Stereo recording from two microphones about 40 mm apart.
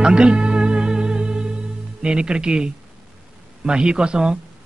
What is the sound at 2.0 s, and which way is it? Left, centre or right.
Music, right.